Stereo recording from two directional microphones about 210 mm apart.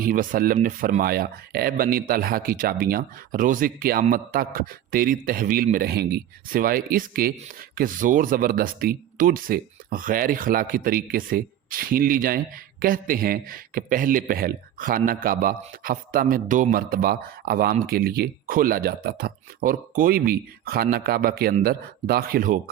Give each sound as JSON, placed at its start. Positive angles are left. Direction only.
{"t": 0.0, "sound": "speech", "side_deg": -40}